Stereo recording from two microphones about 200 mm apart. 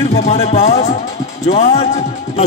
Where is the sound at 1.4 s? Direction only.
35° left (ahead or behind).